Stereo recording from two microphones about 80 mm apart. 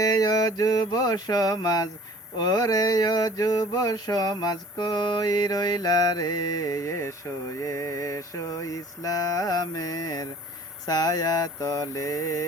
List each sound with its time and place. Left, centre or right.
0.0 s music: left
2.4 s mantra: left